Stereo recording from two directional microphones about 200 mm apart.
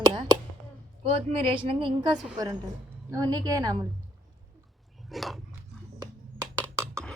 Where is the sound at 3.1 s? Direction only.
20° right (ahead or behind).